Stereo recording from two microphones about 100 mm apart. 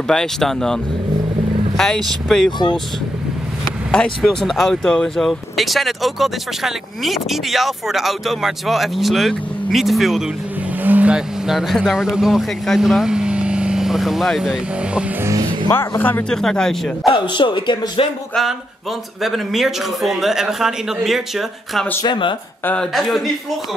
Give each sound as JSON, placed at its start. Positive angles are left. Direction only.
{"t": 0.1, "sound": "speech", "side_deg": 5}
{"t": 2.2, "sound": "speech", "side_deg": 5}
{"t": 3.9, "sound": "speech", "side_deg": 10}
{"t": 10.8, "sound": "speech", "side_deg": -15}
{"t": 16.0, "sound": "speech", "side_deg": 20}
{"t": 16.3, "sound": "speech", "side_deg": 5}
{"t": 17.1, "sound": "speech", "side_deg": 55}
{"t": 19.2, "sound": "speech", "side_deg": 0}
{"t": 22.0, "sound": "speech", "side_deg": 50}
{"t": 22.9, "sound": "speech", "side_deg": 0}